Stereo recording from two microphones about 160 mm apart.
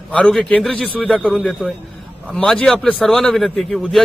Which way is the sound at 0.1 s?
5° left (ahead or behind).